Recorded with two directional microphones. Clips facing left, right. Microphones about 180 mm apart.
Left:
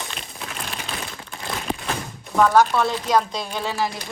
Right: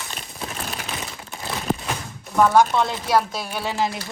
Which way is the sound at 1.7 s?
Centre (ahead or behind).